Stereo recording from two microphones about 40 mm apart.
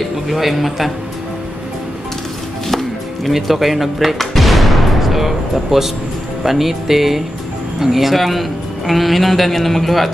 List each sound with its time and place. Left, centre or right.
0.3 s a man's voice: centre
2.7 s music: centre
6.4 s a man's voice: centre